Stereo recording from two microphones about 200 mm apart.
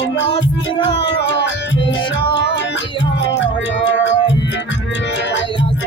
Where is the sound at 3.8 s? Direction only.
65° left (ahead or behind).